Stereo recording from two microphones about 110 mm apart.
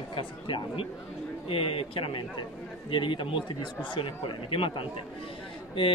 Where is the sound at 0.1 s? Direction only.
50° left (ahead or behind).